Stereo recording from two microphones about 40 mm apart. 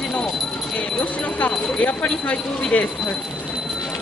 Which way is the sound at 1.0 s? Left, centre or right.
Left.